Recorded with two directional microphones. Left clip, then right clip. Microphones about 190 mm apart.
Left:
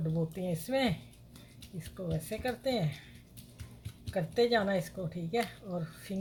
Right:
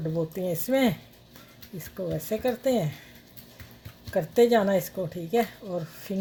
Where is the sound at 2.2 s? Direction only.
50° right (ahead or behind).